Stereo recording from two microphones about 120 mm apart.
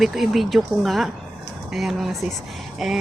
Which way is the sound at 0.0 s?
Centre (ahead or behind).